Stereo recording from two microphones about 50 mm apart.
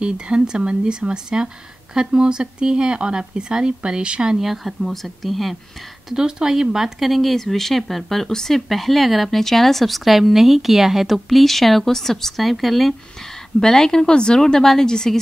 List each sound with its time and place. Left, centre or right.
0.0 s speech: centre
6.0 s speech: centre